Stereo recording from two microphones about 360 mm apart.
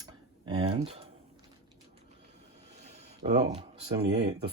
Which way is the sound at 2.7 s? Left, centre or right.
Centre.